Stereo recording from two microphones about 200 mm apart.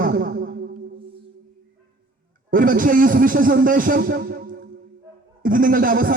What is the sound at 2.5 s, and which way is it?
A man's voice, 45° right (ahead or behind).